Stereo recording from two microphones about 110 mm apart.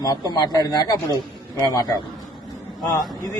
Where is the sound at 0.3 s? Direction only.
40° left (ahead or behind).